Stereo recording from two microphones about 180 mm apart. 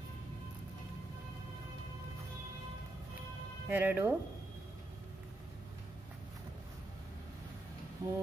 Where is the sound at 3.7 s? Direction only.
10° right (ahead or behind).